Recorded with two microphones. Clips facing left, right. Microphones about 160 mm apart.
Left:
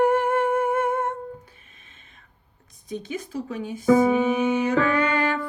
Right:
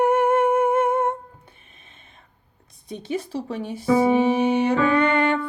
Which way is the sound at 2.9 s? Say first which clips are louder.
Right 3 dB; 30° right (ahead or behind).